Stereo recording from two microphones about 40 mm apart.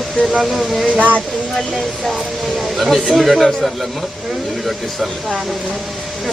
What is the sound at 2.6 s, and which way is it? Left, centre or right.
Speech, centre.